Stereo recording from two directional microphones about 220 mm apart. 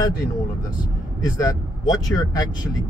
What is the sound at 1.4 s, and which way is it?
Speech, 15° left (ahead or behind).